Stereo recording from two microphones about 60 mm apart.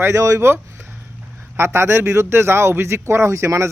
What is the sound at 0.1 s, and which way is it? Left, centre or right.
Speech, right.